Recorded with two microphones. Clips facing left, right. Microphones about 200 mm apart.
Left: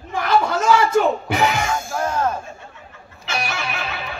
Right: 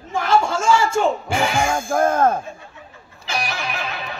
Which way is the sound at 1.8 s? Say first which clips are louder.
Right 5 dB; 50° right (ahead or behind).